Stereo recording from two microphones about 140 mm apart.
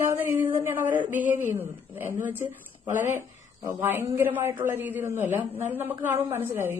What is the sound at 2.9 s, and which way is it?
Speech, 65° left (ahead or behind).